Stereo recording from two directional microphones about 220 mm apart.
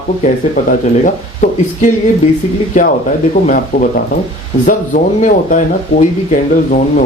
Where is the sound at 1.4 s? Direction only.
35° left (ahead or behind).